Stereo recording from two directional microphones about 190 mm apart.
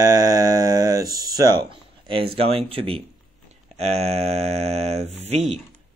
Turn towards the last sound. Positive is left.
turn(degrees=-35)  # may be behind; listen again after turning